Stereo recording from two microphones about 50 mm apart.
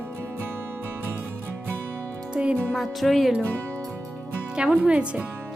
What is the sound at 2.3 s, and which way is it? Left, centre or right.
Speech, right.